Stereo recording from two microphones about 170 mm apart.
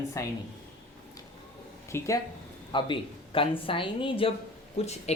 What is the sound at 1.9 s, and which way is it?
Speech, 15° left (ahead or behind).